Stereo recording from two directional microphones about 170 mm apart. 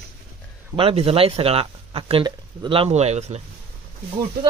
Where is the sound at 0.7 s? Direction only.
30° right (ahead or behind).